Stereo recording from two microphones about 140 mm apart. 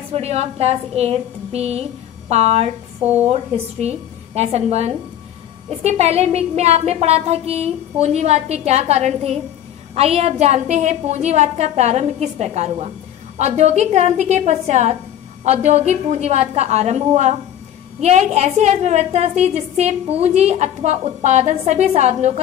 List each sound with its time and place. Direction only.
0.1 s a woman's voice: 50° right (ahead or behind)